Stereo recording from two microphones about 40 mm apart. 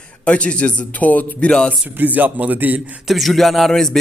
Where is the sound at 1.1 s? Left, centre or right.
Left.